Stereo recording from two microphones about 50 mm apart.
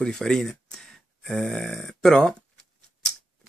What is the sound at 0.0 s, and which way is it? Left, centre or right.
Speech, centre.